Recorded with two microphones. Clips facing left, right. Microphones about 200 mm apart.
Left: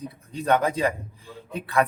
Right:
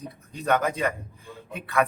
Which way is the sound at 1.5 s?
30° left (ahead or behind).